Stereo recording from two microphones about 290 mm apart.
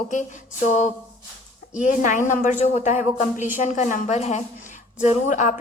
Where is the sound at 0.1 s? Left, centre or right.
Left.